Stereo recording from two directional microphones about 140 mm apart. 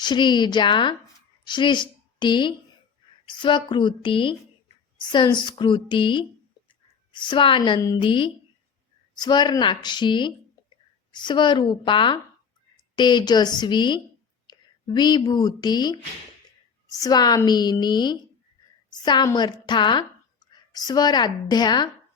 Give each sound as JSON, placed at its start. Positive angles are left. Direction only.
{"t": 0.0, "sound": "a woman's voice", "side_deg": 35}
{"t": 6.7, "sound": "a sound", "side_deg": 35}
{"t": 7.9, "sound": "speech", "side_deg": 35}